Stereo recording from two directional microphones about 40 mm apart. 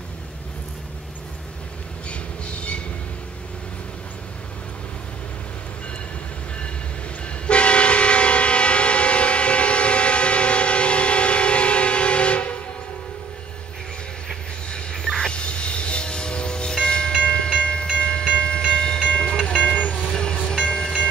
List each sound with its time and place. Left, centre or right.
2.0 s train: left
7.4 s train: left
14.7 s train: centre
15.0 s a sound: centre
15.3 s train: left
19.8 s vehicle: left
20.4 s train: centre